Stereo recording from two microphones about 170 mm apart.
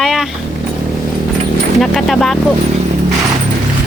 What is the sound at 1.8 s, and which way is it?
Speech, centre (ahead or behind).